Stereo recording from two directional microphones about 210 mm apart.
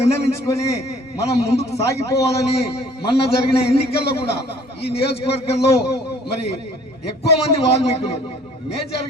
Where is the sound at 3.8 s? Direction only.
30° left (ahead or behind).